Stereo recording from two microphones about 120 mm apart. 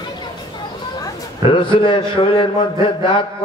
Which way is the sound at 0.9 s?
35° left (ahead or behind).